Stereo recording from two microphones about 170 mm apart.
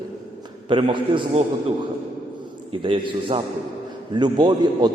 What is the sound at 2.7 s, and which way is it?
A man's voice, 30° right (ahead or behind).